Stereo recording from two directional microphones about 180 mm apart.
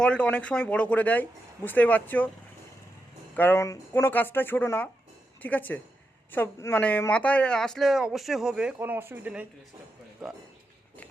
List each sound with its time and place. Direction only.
0.0 s speech: 5° left (ahead or behind)
3.3 s speech: 10° left (ahead or behind); by 9.5 s 10° right (ahead or behind)